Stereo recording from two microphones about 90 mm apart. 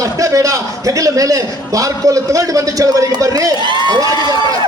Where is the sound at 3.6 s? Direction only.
60° right (ahead or behind).